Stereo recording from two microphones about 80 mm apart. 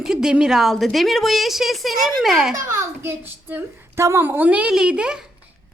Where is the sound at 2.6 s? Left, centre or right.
Right; by 5.2 s centre.